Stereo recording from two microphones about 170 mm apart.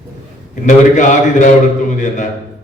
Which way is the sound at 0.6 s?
45° left (ahead or behind).